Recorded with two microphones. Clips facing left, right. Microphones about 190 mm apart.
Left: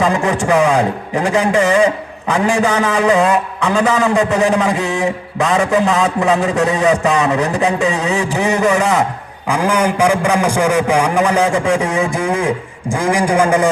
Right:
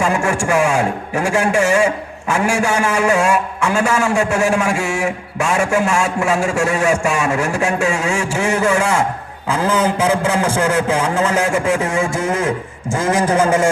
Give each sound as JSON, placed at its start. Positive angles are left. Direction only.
{"t": 0.0, "sound": "a man's voice", "side_deg": 20}